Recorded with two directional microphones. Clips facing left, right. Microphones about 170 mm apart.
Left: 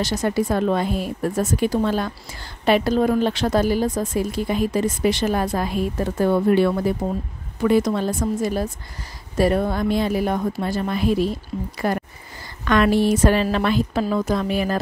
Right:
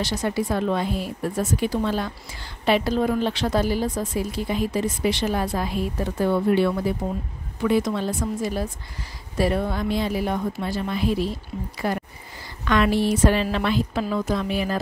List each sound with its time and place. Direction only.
0.0 s a woman's voice: 45° left (ahead or behind)